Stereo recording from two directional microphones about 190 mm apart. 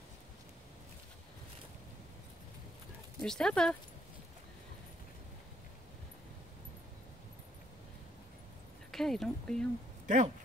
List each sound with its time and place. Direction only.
3.2 s speech: 5° left (ahead or behind)
8.9 s speech: centre (ahead or behind)
10.0 s speech: 40° right (ahead or behind)